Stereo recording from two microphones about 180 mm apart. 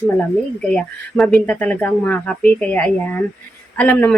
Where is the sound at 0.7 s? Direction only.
Centre (ahead or behind).